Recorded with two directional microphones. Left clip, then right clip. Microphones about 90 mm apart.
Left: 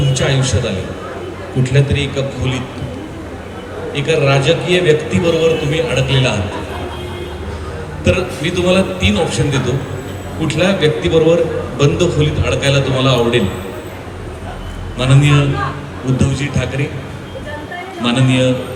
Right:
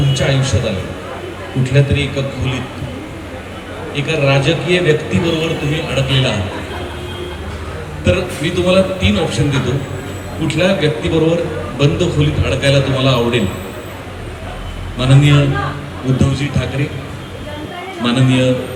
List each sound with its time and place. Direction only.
0.1 s speech: 40° left (ahead or behind)
3.9 s speech: 40° left (ahead or behind)
8.0 s speech: 40° left (ahead or behind)
14.9 s speech: 40° left (ahead or behind)
18.0 s speech: 40° left (ahead or behind)